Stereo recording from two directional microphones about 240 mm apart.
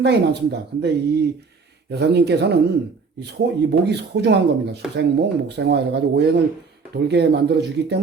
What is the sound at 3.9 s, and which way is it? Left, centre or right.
Speech, right.